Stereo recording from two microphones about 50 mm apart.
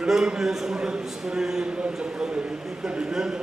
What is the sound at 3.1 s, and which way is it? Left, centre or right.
Speech, centre.